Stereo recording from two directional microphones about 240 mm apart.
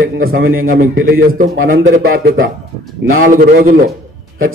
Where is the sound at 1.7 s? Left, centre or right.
Right.